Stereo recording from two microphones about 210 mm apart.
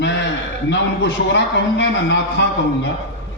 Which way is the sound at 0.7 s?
55° left (ahead or behind).